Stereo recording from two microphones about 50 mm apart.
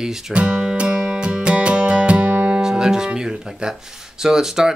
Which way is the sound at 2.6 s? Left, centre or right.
Centre.